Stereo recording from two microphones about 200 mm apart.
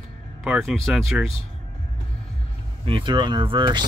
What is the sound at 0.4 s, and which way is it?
Speech, centre (ahead or behind).